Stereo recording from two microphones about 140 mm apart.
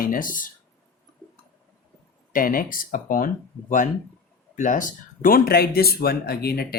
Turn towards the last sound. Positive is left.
turn(degrees=90)